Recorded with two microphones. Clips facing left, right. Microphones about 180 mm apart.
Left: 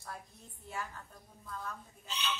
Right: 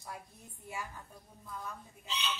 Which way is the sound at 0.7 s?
10° right (ahead or behind).